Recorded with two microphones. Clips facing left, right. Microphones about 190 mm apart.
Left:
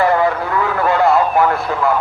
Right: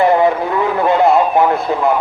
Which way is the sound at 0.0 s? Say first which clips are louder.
Right 3 dB; 20° right (ahead or behind).